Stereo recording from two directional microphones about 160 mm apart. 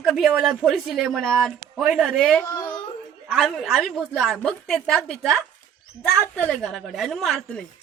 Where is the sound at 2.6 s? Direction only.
25° left (ahead or behind).